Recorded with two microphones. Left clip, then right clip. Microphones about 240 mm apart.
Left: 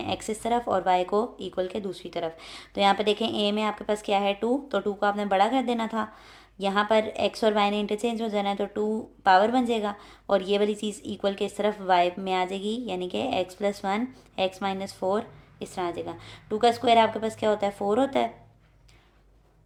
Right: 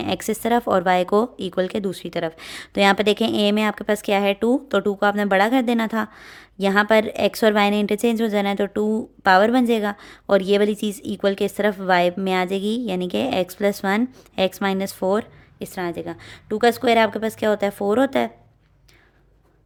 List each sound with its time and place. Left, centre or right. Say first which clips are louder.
0.0 s speech: right 6 dB; right